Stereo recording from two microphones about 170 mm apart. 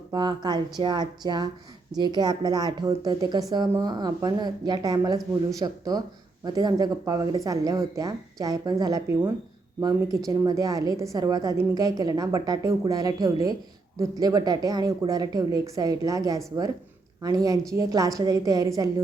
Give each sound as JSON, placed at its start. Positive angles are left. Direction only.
{"t": 0.1, "sound": "a woman's voice", "side_deg": -25}